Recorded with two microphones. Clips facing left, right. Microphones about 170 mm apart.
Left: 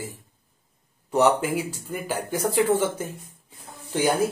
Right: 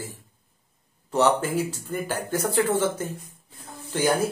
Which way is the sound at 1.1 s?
15° left (ahead or behind).